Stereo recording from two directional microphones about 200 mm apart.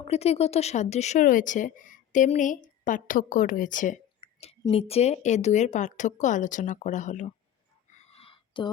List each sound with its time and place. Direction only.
0.0 s speech: 30° left (ahead or behind)
4.2 s speech: 30° left (ahead or behind)
7.9 s a sound: 35° left (ahead or behind)